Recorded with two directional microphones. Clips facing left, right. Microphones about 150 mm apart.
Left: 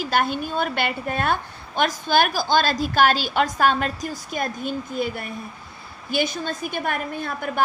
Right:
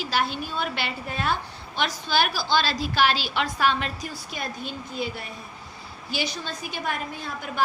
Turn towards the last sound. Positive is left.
turn(degrees=55)  # may be behind; listen again after turning